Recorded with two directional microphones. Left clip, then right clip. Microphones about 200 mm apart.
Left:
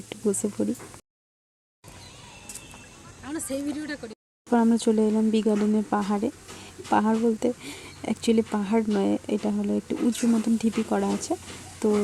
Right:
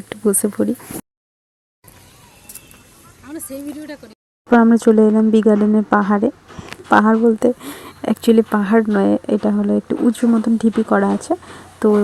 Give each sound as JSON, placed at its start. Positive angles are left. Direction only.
{"t": 0.1, "sound": "speech", "side_deg": -20}
{"t": 3.2, "sound": "speech", "side_deg": 5}
{"t": 4.4, "sound": "speech", "side_deg": -25}